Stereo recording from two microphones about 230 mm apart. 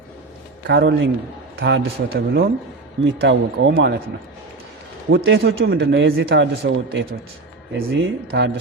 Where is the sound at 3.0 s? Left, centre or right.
Right.